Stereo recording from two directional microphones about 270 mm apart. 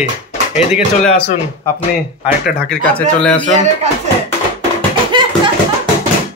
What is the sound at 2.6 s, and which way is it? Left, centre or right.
Speech, centre.